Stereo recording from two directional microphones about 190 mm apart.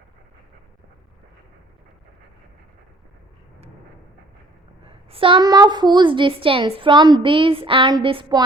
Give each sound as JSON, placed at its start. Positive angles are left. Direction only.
{"t": 4.9, "sound": "a woman's voice", "side_deg": -30}